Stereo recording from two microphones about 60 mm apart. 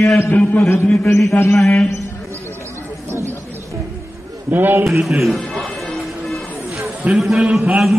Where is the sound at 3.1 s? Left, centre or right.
Right.